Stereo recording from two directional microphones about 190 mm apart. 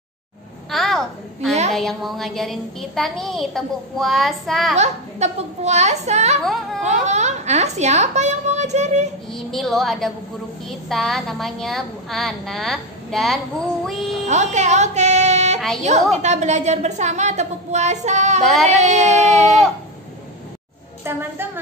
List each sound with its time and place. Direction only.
0.7 s a sound: centre (ahead or behind)
1.7 s a child's voice: centre (ahead or behind)
4.7 s a woman's voice: 35° right (ahead or behind)
6.4 s a child's voice: centre (ahead or behind)
6.8 s a woman's voice: 35° right (ahead or behind)
9.3 s a child's voice: centre (ahead or behind)
14.2 s music: 40° right (ahead or behind)
15.8 s a woman's voice: 35° right (ahead or behind)
18.4 s a child's voice: centre (ahead or behind)
18.7 s a woman's voice: 35° right (ahead or behind)
21.0 s a woman's voice: 10° right (ahead or behind)